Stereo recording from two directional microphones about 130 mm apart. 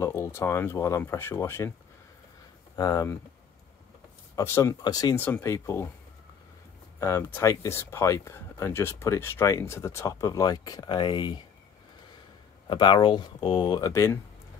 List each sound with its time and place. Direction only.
0.0 s speech: 20° left (ahead or behind)
2.7 s speech: 25° left (ahead or behind)
4.4 s speech: 20° left (ahead or behind)
5.1 s speech: 15° left (ahead or behind)
7.0 s speech: 20° left (ahead or behind); by 11.4 s 35° left (ahead or behind)
12.6 s speech: 40° left (ahead or behind)